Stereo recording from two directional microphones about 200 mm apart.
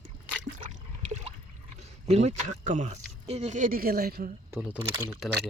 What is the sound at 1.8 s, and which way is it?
Speech, 35° right (ahead or behind).